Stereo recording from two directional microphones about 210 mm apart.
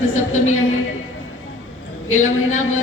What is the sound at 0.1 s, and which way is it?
Speech, 85° left.